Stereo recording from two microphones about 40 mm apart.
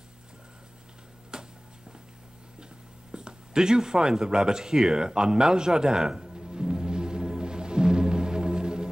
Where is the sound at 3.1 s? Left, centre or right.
Centre.